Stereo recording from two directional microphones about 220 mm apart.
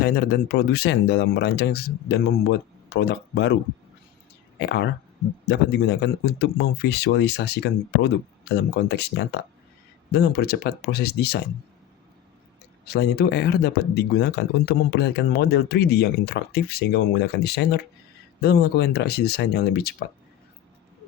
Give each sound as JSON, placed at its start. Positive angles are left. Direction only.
{"t": 0.0, "sound": "speech", "side_deg": 45}
{"t": 4.6, "sound": "speech", "side_deg": 50}
{"t": 12.8, "sound": "speech", "side_deg": 45}